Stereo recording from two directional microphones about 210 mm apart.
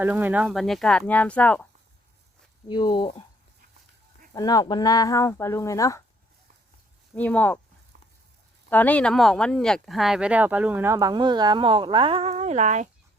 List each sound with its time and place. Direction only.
0.0 s speech: 10° right (ahead or behind)
2.6 s speech: 20° left (ahead or behind)
4.4 s speech: 20° left (ahead or behind)
7.2 s speech: 5° left (ahead or behind)
8.7 s speech: 5° left (ahead or behind); by 12.9 s 35° right (ahead or behind)